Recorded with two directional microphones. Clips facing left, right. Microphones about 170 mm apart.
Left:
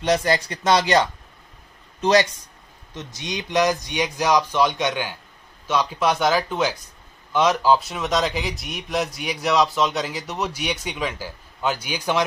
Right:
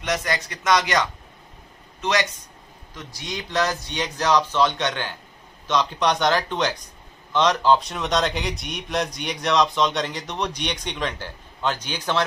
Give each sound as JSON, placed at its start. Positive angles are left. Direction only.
{"t": 0.0, "sound": "speech", "side_deg": 30}